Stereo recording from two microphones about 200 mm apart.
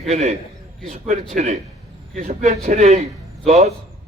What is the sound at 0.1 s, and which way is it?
A man's voice, 30° right (ahead or behind).